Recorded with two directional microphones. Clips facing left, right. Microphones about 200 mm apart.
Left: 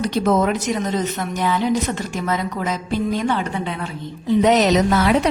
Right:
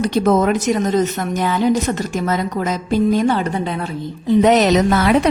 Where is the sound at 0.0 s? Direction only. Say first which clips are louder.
Right 3 dB; 50° right (ahead or behind).